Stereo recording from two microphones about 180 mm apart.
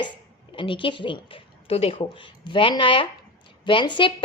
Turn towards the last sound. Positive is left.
turn(degrees=25)  # may be behind; listen again after turning